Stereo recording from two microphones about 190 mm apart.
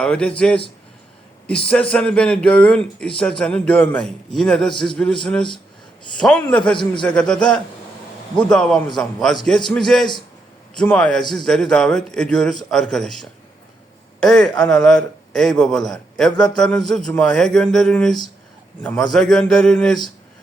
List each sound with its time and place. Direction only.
0.0 s a man's voice: 5° left (ahead or behind)